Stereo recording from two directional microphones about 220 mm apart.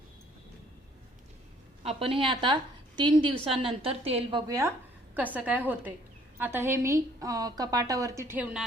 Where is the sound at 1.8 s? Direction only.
25° right (ahead or behind).